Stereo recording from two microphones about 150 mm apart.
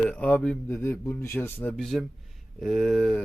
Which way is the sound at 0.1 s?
10° left (ahead or behind).